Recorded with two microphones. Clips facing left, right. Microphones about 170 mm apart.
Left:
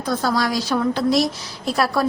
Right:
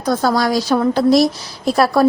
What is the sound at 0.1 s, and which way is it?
A woman's voice, 45° right (ahead or behind).